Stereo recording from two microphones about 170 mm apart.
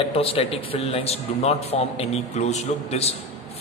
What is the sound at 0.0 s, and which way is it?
A man's voice, 35° left (ahead or behind).